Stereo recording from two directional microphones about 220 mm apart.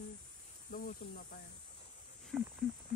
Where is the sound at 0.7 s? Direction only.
40° left (ahead or behind).